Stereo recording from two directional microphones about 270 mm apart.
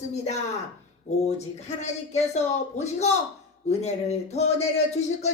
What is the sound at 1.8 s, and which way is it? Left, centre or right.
Speech, left.